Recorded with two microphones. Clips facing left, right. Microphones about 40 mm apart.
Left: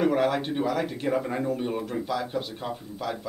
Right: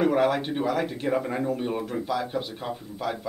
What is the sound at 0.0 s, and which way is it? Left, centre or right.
Speech, centre.